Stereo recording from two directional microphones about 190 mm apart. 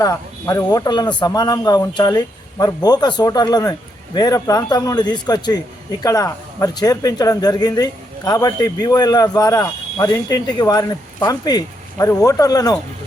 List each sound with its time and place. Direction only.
0.0 s speech: 15° left (ahead or behind)